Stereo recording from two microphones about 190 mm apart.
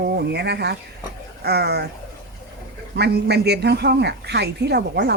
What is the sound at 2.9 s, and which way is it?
A woman's voice, 60° right (ahead or behind).